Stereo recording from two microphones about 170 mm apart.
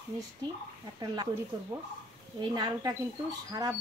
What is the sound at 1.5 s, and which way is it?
A woman's voice, 25° right (ahead or behind).